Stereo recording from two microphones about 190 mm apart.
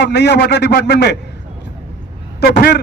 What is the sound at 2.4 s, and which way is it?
Speech, 55° left (ahead or behind).